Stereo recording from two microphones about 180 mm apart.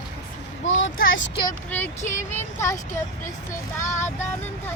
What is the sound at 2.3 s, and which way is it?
Speech, 15° left (ahead or behind).